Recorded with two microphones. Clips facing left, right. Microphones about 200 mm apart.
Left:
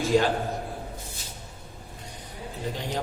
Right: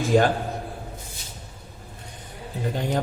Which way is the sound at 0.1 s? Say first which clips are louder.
Right 3 dB; 50° right (ahead or behind).